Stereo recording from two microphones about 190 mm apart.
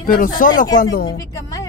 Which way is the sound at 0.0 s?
45° left (ahead or behind).